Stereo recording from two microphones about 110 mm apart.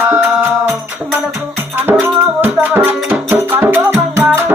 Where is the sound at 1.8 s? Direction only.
15° right (ahead or behind).